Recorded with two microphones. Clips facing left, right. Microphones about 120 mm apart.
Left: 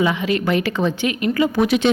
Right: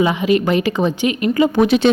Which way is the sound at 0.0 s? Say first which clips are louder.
Right 4 dB; 20° right (ahead or behind).